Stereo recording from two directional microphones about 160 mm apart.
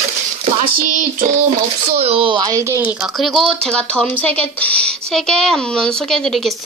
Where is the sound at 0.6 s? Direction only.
55° right (ahead or behind).